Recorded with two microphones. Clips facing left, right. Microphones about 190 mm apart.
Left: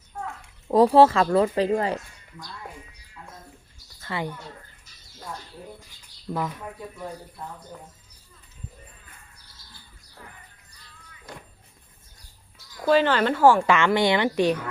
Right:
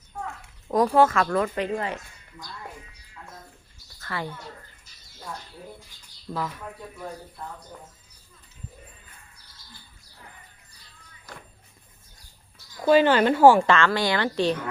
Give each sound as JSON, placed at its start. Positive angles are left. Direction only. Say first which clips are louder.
{"t": 0.7, "sound": "speech", "louder": "left 4 dB", "side_deg": 30}
{"t": 4.0, "sound": "a woman's voice", "louder": "left 2 dB", "side_deg": 20}
{"t": 6.3, "sound": "speech", "louder": "left 2 dB", "side_deg": 10}
{"t": 12.9, "sound": "speech", "louder": "right 2 dB", "side_deg": -10}
{"t": 13.7, "sound": "a woman's voice", "louder": "left 2 dB", "side_deg": 20}